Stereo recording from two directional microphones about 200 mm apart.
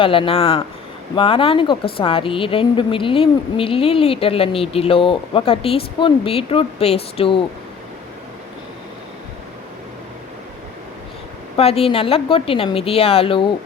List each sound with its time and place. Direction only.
0.0 s speech: 25° left (ahead or behind)
11.5 s speech: 30° left (ahead or behind)